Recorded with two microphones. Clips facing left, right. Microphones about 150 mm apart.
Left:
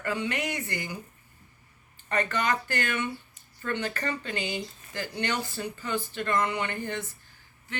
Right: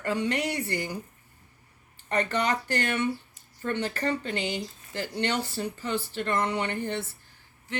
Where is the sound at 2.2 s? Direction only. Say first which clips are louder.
Right 1 dB; 30° right (ahead or behind).